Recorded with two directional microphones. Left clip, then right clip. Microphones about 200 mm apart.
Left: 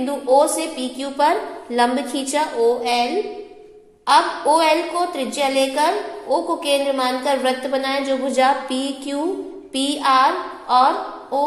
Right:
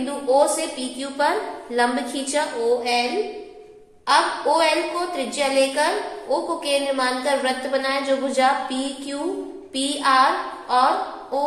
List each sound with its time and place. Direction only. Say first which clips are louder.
0.0 s a woman's voice: left 3 dB; 30° left (ahead or behind)
4.5 s a woman's voice: left 3 dB; 30° left (ahead or behind)